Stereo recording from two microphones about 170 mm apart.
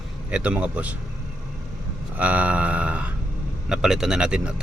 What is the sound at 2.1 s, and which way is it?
Speech, 10° right (ahead or behind).